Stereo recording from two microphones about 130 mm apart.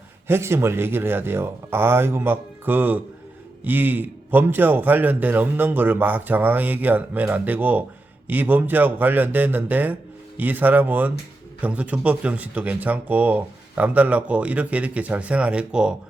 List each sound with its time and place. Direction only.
0.3 s speech: 20° right (ahead or behind)